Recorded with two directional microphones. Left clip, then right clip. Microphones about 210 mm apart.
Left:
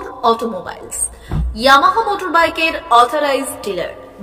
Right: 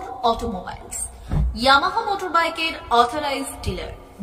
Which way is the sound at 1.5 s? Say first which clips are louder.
Left 7 dB; 15° left (ahead or behind).